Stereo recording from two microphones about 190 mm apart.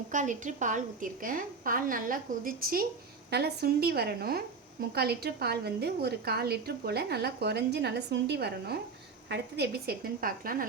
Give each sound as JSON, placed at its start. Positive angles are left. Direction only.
{"t": 0.1, "sound": "a woman's voice", "side_deg": -40}